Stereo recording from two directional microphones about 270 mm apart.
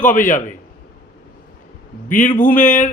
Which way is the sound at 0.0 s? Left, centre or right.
Left.